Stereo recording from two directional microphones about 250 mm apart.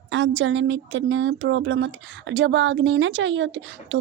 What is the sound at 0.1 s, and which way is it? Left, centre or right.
A woman's voice, right.